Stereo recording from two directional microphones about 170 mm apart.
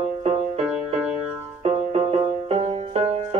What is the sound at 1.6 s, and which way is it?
Music, 35° right (ahead or behind).